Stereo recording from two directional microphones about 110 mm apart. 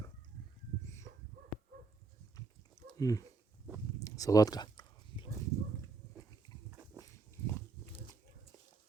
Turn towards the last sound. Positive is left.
turn(degrees=25)  # may be behind; listen again after turning